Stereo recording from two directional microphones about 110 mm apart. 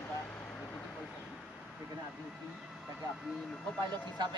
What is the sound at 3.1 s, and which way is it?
Speech, centre (ahead or behind).